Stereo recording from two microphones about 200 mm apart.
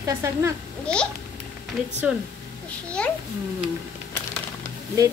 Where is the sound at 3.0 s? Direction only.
5° left (ahead or behind).